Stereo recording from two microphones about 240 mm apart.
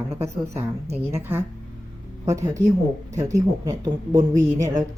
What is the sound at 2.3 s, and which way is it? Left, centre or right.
A woman's voice, centre.